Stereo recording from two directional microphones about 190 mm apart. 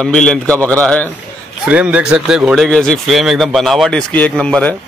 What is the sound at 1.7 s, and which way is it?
A man's voice, 5° right (ahead or behind).